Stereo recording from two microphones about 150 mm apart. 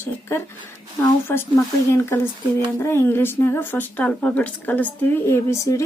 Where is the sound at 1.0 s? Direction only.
15° left (ahead or behind).